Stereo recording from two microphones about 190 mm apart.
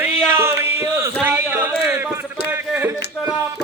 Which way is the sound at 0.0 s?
10° right (ahead or behind).